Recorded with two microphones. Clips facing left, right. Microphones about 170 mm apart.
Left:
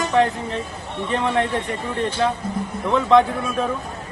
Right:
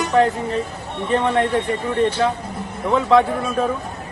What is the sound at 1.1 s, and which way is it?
Speech, centre (ahead or behind).